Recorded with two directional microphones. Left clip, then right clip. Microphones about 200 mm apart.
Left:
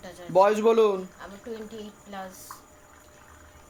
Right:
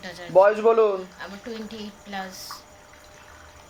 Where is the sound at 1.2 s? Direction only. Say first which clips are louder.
Right 3 dB; 5° left (ahead or behind).